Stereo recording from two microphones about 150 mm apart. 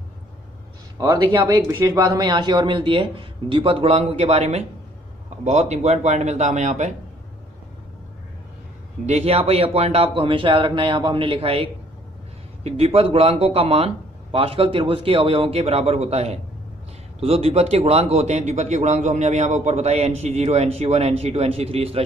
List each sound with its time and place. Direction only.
0.9 s a man's voice: 25° right (ahead or behind); by 7.0 s 55° right (ahead or behind)
9.0 s a man's voice: 45° right (ahead or behind)